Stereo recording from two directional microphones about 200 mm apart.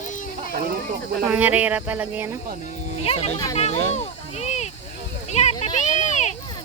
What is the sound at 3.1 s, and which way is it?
Speech, 30° left (ahead or behind).